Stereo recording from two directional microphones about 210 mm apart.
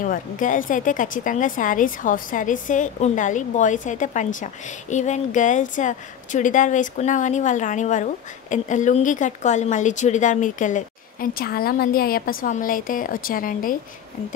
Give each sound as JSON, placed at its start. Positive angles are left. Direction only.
{"t": 0.0, "sound": "a woman's voice", "side_deg": 40}